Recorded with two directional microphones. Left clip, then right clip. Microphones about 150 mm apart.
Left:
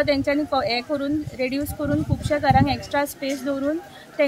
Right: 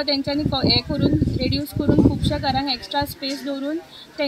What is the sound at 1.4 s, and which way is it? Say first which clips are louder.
Speech: even; 45° left (ahead or behind).